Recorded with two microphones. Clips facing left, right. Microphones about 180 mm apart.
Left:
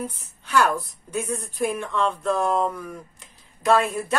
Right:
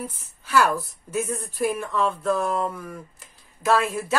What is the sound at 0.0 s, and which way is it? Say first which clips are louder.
A woman's voice: left 3 dB; 5° right (ahead or behind).